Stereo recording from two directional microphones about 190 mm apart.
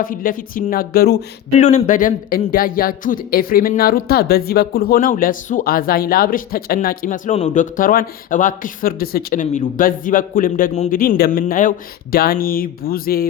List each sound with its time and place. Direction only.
0.0 s a man's voice: 45° left (ahead or behind)
1.5 s a man's voice: 40° left (ahead or behind)